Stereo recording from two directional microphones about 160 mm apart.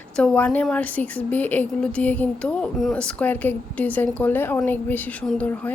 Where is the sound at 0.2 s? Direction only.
10° left (ahead or behind).